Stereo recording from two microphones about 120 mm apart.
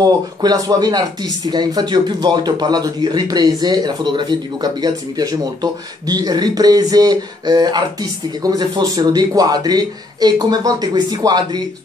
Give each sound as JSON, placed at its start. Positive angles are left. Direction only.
{"t": 0.0, "sound": "speech", "side_deg": -35}